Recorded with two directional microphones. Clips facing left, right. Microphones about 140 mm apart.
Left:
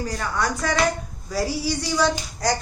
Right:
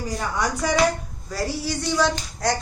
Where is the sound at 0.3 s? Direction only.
10° right (ahead or behind).